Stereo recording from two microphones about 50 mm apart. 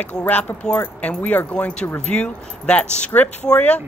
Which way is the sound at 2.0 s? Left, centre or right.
Left.